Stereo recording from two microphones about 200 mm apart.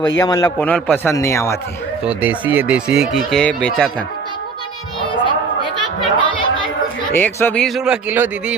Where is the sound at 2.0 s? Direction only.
5° right (ahead or behind).